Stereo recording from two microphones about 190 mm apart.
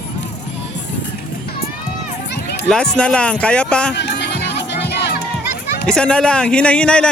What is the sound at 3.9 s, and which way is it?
Music, 65° left (ahead or behind).